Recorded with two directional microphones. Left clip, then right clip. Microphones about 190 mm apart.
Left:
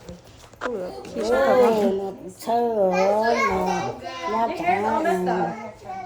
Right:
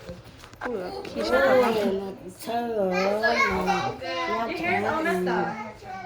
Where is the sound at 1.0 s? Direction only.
55° left (ahead or behind).